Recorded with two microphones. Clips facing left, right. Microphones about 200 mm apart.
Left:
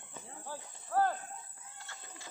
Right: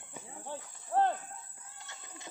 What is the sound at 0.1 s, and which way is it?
Cricket, 20° right (ahead or behind).